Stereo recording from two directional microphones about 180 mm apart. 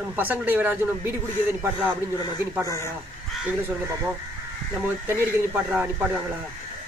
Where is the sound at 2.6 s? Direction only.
15° left (ahead or behind).